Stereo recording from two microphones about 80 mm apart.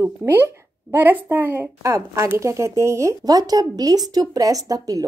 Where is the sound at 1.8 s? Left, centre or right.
Right.